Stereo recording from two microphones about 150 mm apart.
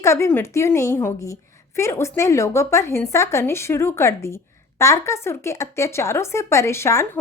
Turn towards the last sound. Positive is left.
turn(degrees=20)  # may be behind; listen again after turning